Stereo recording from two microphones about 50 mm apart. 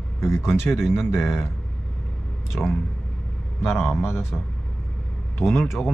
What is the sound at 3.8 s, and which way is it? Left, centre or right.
Speech, left.